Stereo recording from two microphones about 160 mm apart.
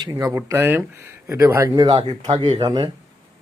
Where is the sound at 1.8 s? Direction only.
30° right (ahead or behind).